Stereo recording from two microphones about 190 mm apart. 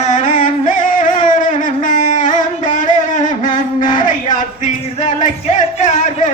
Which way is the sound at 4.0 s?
45° left (ahead or behind).